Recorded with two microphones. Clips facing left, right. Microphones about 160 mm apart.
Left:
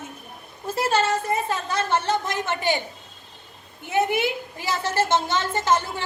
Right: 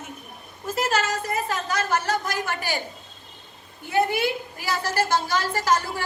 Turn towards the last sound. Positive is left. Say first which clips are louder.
# left 1 dB
turn(degrees=25)  # may be behind; listen again after turning